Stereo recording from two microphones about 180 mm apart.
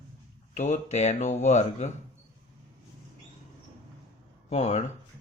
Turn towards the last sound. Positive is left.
turn(degrees=35)  # may be behind; listen again after turning